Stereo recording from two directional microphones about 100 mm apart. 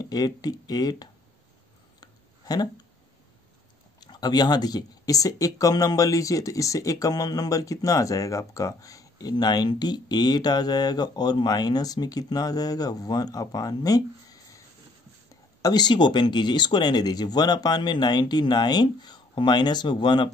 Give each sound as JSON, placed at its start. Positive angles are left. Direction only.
{"t": 0.0, "sound": "speech", "side_deg": 40}
{"t": 2.0, "sound": "a sound", "side_deg": 40}
{"t": 4.0, "sound": "speech", "side_deg": 45}
{"t": 15.6, "sound": "speech", "side_deg": 45}